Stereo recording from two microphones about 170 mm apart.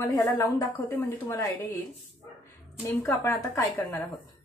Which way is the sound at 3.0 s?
15° left (ahead or behind).